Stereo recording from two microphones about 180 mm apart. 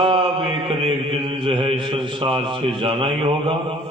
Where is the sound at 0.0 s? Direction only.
30° right (ahead or behind).